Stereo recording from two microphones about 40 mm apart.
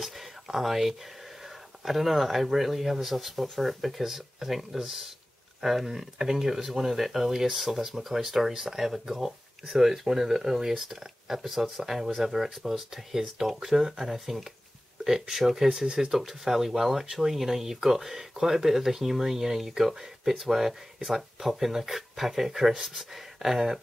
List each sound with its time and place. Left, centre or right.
0.0 s speech: centre